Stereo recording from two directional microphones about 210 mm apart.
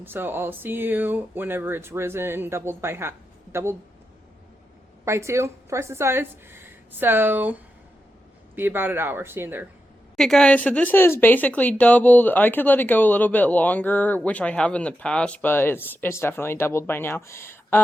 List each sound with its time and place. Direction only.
0.0 s speech: 10° right (ahead or behind)
5.0 s speech: 15° right (ahead or behind)
8.5 s speech: 10° right (ahead or behind)
10.2 s speech: centre (ahead or behind)